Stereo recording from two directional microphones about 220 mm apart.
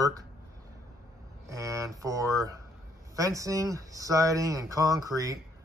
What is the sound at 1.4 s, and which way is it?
Speech, 15° right (ahead or behind).